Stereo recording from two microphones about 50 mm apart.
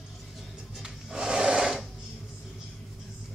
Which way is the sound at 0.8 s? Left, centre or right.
Centre.